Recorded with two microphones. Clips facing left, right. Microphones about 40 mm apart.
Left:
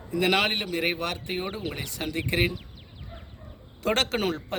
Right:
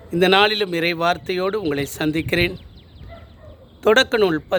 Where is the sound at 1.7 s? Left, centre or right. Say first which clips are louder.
Right 12 dB; right.